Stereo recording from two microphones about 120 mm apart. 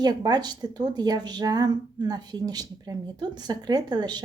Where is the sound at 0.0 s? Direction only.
35° right (ahead or behind).